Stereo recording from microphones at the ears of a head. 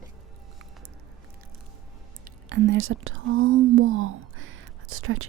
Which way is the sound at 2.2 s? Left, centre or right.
Right.